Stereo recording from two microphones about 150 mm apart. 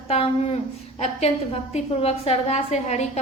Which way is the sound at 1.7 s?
40° left (ahead or behind).